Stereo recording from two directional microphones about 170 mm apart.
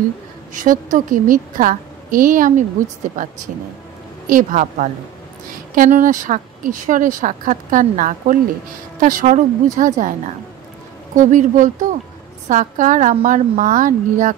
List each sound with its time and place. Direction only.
0.6 s speech: 50° right (ahead or behind)
4.3 s speech: 50° right (ahead or behind)
11.1 s speech: 50° right (ahead or behind)